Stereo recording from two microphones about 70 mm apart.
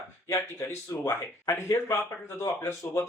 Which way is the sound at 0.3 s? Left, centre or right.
Left.